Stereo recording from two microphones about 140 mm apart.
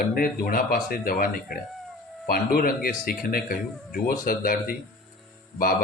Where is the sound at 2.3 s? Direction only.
90° left.